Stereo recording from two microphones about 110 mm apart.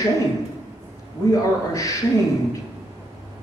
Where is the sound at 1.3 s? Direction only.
30° left (ahead or behind).